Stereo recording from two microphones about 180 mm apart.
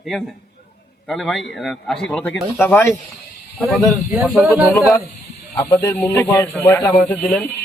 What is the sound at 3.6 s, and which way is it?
Speech, centre (ahead or behind).